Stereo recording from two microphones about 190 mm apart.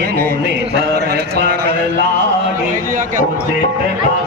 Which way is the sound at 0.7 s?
60° right (ahead or behind).